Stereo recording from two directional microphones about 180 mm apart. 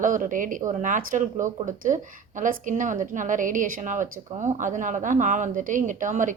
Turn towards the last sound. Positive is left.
turn(degrees=-45)  # may be behind; listen again after turning